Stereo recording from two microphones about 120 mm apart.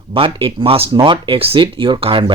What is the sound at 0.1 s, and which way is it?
Speech, 45° right (ahead or behind).